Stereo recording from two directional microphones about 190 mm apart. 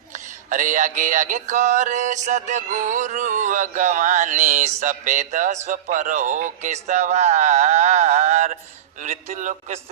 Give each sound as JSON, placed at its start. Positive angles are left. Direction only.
{"t": 0.5, "sound": "music", "side_deg": -40}